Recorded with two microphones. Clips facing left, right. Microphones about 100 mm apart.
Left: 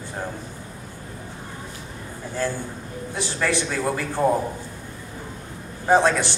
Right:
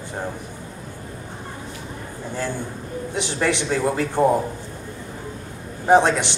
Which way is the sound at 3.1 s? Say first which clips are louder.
Right 2 dB; 20° right (ahead or behind).